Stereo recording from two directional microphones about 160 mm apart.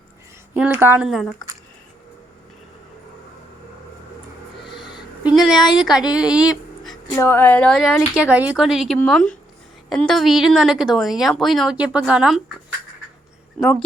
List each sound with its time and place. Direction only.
0.5 s speech: 10° right (ahead or behind)
1.0 s a woman's voice: centre (ahead or behind)
4.8 s a sound: 30° left (ahead or behind)
5.2 s a sound: centre (ahead or behind)
5.8 s a woman's voice: 5° right (ahead or behind)
7.2 s a woman's voice: 15° left (ahead or behind); by 12.4 s 5° right (ahead or behind)